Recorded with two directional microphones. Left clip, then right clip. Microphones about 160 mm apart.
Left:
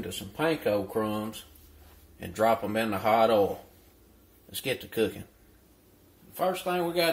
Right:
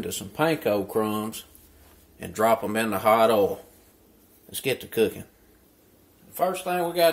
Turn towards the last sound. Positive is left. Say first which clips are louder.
# right 4 dB
turn(degrees=-5)  # may be behind; listen again after turning